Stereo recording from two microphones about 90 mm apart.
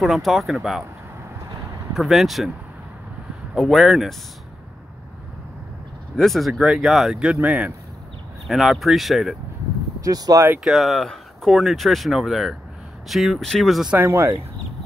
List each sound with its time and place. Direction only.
0.0 s speech: centre (ahead or behind)
2.0 s speech: centre (ahead or behind)
3.5 s speech: centre (ahead or behind)
6.1 s speech: centre (ahead or behind); by 7.7 s 15° right (ahead or behind)
8.5 s speech: centre (ahead or behind)
10.0 s speech: 45° right (ahead or behind)
10.6 s speech: centre (ahead or behind)
13.9 s speech: 25° right (ahead or behind)